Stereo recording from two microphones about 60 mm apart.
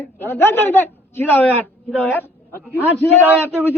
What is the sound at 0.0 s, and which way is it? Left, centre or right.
A woman's voice, left.